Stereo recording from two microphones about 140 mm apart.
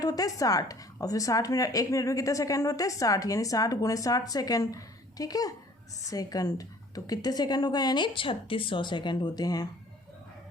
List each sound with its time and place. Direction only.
0.0 s a woman's voice: 25° left (ahead or behind)